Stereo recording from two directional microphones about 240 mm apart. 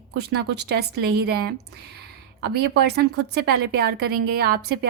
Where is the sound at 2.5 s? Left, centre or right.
Right.